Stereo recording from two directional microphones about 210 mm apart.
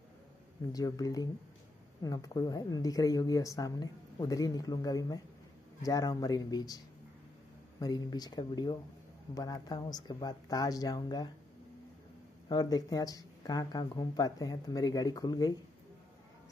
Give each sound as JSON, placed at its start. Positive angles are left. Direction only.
{"t": 0.7, "sound": "a woman's voice", "side_deg": 15}
{"t": 7.8, "sound": "speech", "side_deg": 20}
{"t": 12.4, "sound": "a woman's voice", "side_deg": 20}